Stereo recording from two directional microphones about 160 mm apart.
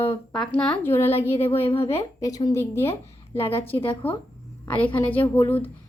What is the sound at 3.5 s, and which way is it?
Speech, 35° left (ahead or behind).